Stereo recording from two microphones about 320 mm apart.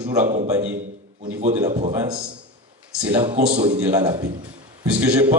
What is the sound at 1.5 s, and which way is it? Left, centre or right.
A man's voice, centre.